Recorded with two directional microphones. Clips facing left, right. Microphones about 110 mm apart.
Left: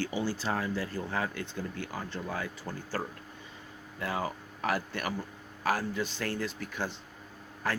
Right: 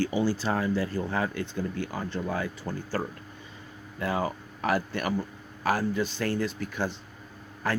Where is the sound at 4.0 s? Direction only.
15° right (ahead or behind).